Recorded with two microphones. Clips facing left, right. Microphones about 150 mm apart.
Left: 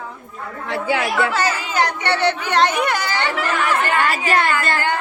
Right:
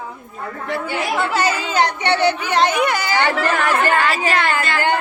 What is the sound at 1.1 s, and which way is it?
Speech, 20° right (ahead or behind).